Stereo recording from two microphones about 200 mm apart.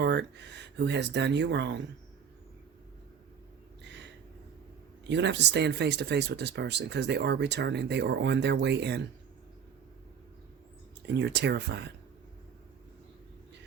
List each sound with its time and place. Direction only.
0.0 s speech: 60° right (ahead or behind)
3.8 s a sound: 60° right (ahead or behind)
5.0 s speech: 60° right (ahead or behind)
11.1 s speech: 60° right (ahead or behind)